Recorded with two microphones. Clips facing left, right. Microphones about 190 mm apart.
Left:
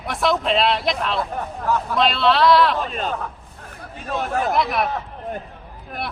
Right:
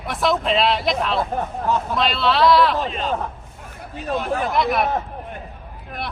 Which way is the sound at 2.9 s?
45° left (ahead or behind).